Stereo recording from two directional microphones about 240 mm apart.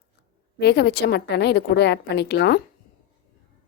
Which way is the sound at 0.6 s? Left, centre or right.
Left.